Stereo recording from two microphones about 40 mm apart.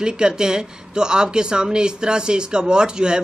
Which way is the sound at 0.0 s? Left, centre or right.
Centre.